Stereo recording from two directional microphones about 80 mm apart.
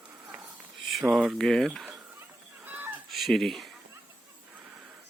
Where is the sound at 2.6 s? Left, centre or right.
Right.